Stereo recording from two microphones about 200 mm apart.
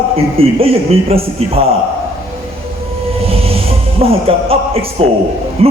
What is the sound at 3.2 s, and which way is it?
Train, 30° right (ahead or behind).